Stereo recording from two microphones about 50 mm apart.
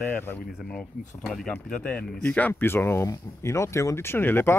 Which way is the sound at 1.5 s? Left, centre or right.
Left.